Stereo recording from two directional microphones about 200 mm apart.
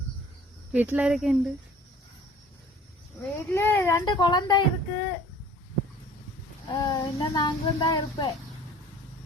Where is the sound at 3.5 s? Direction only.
10° left (ahead or behind).